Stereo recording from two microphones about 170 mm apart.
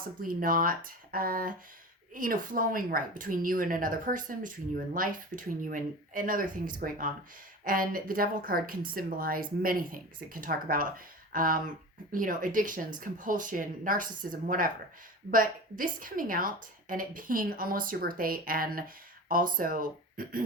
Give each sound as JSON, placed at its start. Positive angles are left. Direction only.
{"t": 0.0, "sound": "a woman's voice", "side_deg": -55}